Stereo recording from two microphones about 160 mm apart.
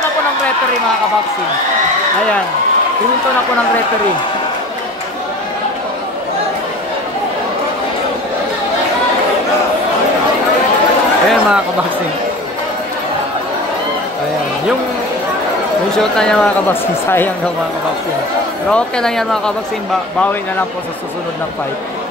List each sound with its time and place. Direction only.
11.2 s speech: 5° right (ahead or behind)
16.0 s speech: 5° left (ahead or behind)
18.7 s speech: 5° left (ahead or behind)